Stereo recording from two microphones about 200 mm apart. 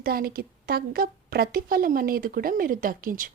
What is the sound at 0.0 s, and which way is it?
Speech, 50° right (ahead or behind).